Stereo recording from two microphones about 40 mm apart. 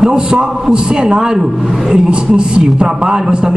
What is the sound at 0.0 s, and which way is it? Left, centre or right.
A man's voice, centre.